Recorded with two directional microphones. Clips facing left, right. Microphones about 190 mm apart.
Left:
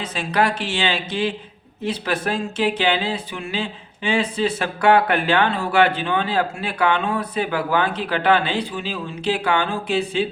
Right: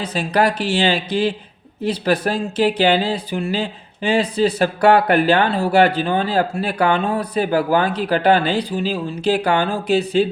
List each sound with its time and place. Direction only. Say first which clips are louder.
0.0 s speech: right 3 dB; 35° right (ahead or behind)